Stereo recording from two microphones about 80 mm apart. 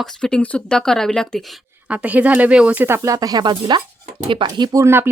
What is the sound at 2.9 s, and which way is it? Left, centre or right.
Speech, right.